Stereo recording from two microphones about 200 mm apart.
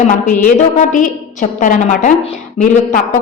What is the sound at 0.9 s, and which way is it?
A woman's voice, 40° left (ahead or behind).